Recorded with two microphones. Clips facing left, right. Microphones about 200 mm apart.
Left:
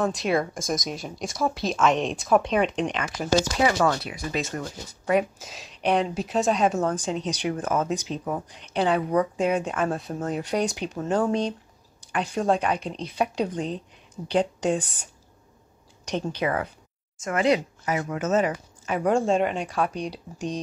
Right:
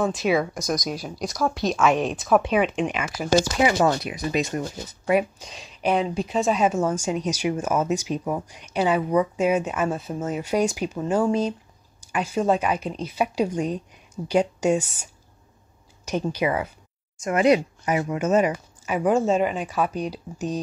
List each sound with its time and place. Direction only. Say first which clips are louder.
0.0 s speech: right 2 dB; centre (ahead or behind)
3.7 s speech: right 2 dB; 20° right (ahead or behind)
5.4 s speech: right 1 dB; 5° left (ahead or behind)
16.1 s speech: right 2 dB; 10° right (ahead or behind)